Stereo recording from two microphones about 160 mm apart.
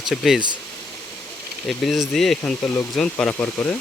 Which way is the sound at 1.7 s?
Centre (ahead or behind).